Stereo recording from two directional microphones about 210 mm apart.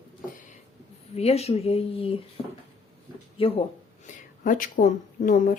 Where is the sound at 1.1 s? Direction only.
30° left (ahead or behind).